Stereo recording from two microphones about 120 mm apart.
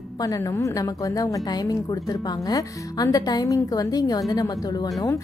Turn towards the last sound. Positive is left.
turn(degrees=30)  # may be behind; listen again after turning